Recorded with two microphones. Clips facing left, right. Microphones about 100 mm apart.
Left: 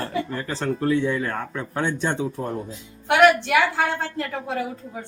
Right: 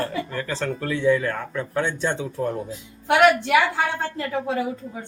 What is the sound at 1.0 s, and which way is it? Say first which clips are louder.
Speech: right 4 dB; 25° left (ahead or behind).